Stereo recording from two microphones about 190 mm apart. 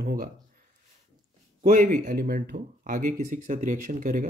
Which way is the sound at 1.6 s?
40° right (ahead or behind).